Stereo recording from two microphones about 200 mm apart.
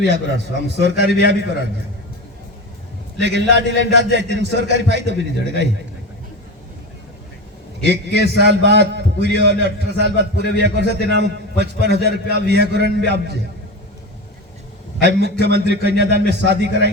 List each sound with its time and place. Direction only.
0.8 s a man's voice: 60° right (ahead or behind)
3.2 s a man's voice: 60° right (ahead or behind)
7.9 s a man's voice: 55° left (ahead or behind)
8.4 s a man's voice: 60° right (ahead or behind)
10.3 s a man's voice: 55° left (ahead or behind)
10.6 s a man's voice: 60° right (ahead or behind)
15.0 s a man's voice: 55° right (ahead or behind)